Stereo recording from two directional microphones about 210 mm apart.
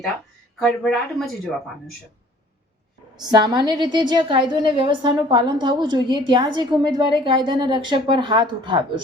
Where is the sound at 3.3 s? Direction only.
20° right (ahead or behind).